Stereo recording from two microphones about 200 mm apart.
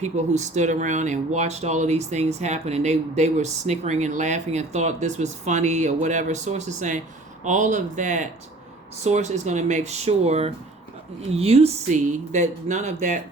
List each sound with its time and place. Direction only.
0.0 s speech: 35° right (ahead or behind)